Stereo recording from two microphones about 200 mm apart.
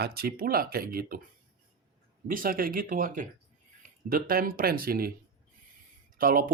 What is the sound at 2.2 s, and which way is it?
Speech, 45° right (ahead or behind).